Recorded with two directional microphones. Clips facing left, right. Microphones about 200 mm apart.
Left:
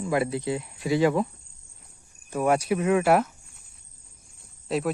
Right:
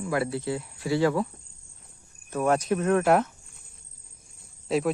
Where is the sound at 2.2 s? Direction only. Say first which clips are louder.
Left 1 dB; 10° left (ahead or behind).